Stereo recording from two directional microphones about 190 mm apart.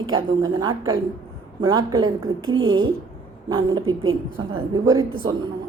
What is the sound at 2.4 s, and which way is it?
Speech, 90° right.